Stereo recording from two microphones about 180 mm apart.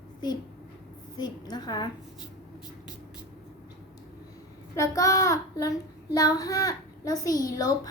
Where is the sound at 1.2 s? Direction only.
25° left (ahead or behind).